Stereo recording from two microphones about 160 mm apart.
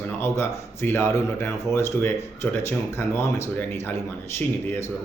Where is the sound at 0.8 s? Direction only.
15° left (ahead or behind).